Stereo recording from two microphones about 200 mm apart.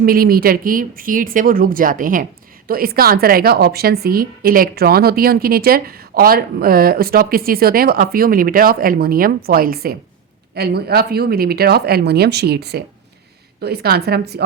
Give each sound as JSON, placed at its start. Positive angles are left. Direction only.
{"t": 0.0, "sound": "a woman's voice", "side_deg": -45}